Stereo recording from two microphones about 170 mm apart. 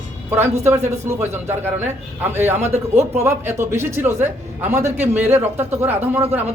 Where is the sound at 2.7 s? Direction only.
40° right (ahead or behind).